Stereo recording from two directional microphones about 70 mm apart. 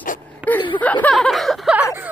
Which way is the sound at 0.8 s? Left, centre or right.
Left.